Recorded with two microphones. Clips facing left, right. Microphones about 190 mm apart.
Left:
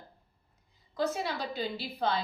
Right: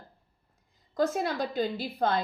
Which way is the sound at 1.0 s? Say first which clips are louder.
Right 4 dB; 50° right (ahead or behind).